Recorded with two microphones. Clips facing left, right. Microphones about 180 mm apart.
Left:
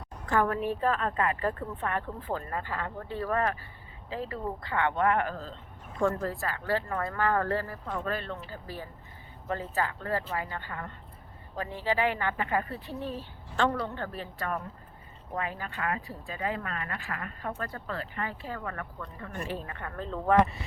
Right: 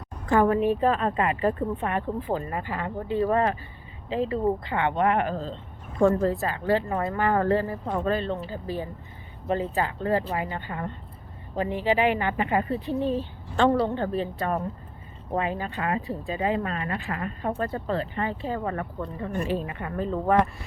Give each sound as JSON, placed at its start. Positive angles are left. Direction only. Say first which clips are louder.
{"t": 0.3, "sound": "speech", "louder": "right 7 dB", "side_deg": -20}
{"t": 20.4, "sound": "speech", "louder": "even", "side_deg": 0}